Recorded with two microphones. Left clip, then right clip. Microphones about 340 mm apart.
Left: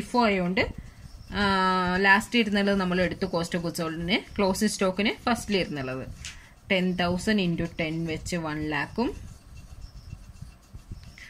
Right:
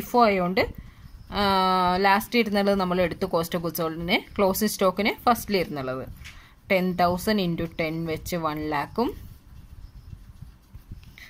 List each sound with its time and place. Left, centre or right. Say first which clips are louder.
0.0 s speech: right 4 dB; centre